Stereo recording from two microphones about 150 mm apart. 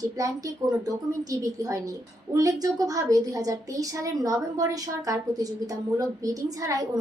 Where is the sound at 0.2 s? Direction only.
25° right (ahead or behind).